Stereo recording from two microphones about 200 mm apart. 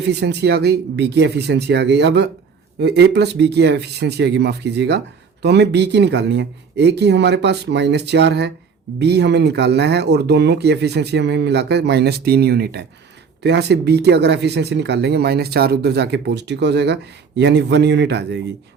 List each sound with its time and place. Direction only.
0.1 s speech: 55° right (ahead or behind)